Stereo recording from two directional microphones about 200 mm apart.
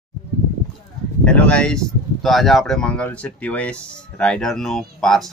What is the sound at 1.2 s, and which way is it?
Speech, 5° left (ahead or behind).